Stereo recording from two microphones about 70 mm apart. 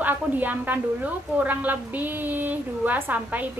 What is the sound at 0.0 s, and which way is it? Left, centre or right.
A woman's voice, right.